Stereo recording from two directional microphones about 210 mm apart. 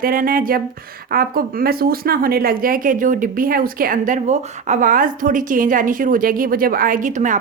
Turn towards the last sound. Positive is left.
turn(degrees=-35)  # may be behind; listen again after turning